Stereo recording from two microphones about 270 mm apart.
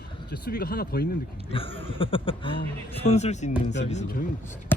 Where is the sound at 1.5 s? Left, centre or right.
Centre.